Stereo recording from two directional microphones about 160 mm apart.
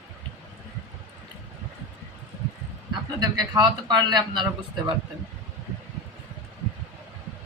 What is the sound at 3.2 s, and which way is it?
A man's voice, 25° right (ahead or behind).